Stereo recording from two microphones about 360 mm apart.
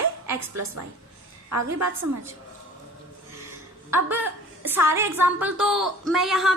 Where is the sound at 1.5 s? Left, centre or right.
Right.